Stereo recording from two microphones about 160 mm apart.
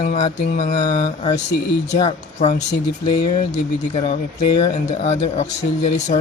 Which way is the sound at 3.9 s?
40° left (ahead or behind).